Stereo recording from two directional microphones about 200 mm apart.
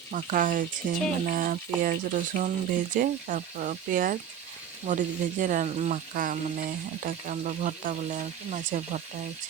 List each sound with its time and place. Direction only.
0.1 s speech: 40° right (ahead or behind)